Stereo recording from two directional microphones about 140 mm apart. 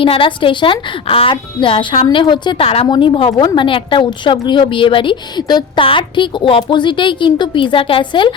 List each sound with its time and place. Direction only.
0.0 s a woman's voice: 40° left (ahead or behind)